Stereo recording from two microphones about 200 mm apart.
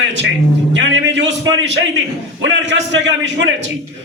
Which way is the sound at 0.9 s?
65° right (ahead or behind).